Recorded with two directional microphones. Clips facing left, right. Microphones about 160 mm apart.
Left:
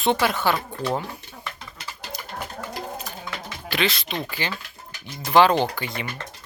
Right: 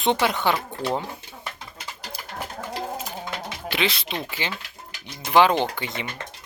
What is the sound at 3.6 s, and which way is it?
Speech, 20° right (ahead or behind).